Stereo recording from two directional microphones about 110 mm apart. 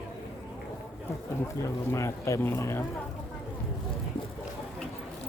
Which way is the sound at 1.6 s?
30° left (ahead or behind).